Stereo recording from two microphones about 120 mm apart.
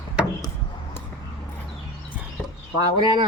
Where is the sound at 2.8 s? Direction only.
35° right (ahead or behind).